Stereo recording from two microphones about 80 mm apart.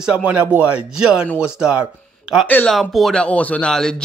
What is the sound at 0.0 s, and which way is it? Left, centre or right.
Speech, centre.